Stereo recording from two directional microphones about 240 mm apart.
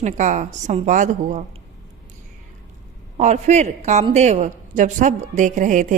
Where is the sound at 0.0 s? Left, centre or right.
Right.